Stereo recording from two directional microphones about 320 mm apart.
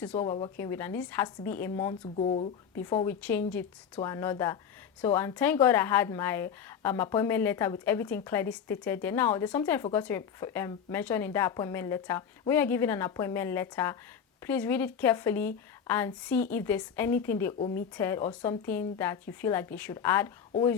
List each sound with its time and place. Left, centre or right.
0.0 s speech: centre
2.1 s speech: centre